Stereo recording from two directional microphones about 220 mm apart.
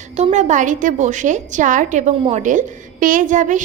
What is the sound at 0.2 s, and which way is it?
A woman's voice, 30° right (ahead or behind).